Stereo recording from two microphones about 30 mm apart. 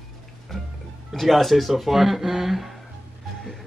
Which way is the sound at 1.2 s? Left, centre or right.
Centre.